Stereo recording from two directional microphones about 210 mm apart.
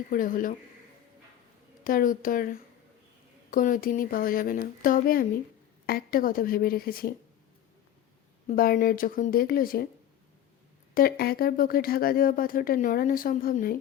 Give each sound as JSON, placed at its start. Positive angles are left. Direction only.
{"t": 0.1, "sound": "speech", "side_deg": 40}
{"t": 1.8, "sound": "speech", "side_deg": 40}
{"t": 8.4, "sound": "speech", "side_deg": 45}
{"t": 10.9, "sound": "speech", "side_deg": 45}